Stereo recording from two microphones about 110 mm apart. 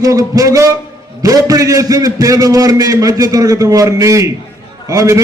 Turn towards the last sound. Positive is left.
turn(degrees=-30)  # may be behind; listen again after turning